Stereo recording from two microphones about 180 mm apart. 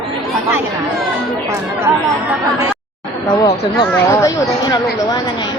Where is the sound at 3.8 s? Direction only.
20° left (ahead or behind).